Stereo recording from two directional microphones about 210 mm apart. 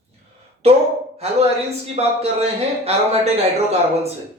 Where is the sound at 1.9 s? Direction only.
30° right (ahead or behind).